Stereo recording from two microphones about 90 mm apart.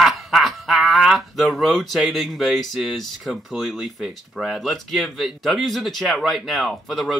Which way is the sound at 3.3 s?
Centre (ahead or behind).